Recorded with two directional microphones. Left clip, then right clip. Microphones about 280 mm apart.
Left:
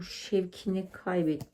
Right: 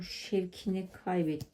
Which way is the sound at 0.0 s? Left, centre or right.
Left.